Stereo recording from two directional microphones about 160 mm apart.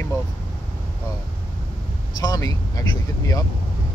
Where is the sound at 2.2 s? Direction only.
20° left (ahead or behind).